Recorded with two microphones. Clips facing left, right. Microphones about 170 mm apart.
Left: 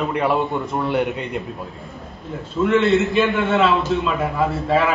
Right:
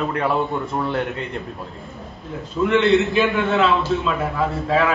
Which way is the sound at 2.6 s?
Centre (ahead or behind).